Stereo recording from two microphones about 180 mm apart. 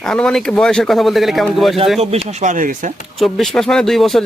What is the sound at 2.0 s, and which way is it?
Speech, 35° right (ahead or behind).